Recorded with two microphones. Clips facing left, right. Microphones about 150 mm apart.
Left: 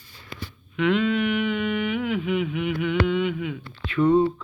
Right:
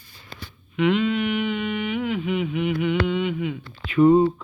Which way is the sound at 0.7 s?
Centre (ahead or behind).